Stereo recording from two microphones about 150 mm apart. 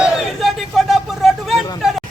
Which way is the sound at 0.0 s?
Centre (ahead or behind).